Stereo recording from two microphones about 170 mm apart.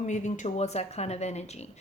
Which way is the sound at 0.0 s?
45° left (ahead or behind).